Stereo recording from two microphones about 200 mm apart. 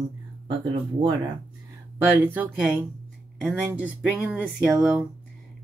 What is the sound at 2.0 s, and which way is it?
Speech, 10° right (ahead or behind).